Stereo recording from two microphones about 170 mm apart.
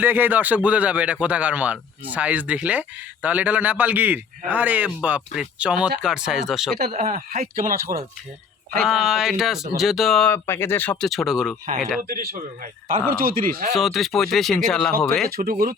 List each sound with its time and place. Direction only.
0.0 s speech: 10° right (ahead or behind)
6.9 s speech: 50° right (ahead or behind)
8.8 s speech: 5° right (ahead or behind)
11.1 s speech: centre (ahead or behind)
13.1 s speech: 55° right (ahead or behind)
13.7 s speech: centre (ahead or behind)
15.4 s speech: 60° right (ahead or behind)